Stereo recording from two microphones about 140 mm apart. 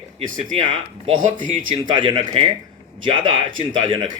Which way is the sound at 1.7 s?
35° right (ahead or behind).